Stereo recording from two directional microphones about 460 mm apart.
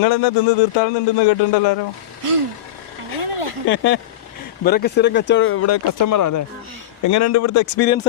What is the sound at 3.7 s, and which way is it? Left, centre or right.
Speech, left.